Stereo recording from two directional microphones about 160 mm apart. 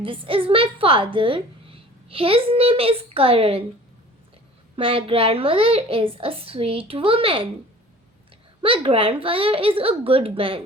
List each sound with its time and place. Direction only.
0.0 s a woman's voice: 35° right (ahead or behind)
4.8 s a woman's voice: 35° right (ahead or behind)
8.6 s a woman's voice: 35° right (ahead or behind)